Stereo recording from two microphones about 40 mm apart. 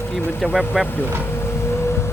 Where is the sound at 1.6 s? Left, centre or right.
Left.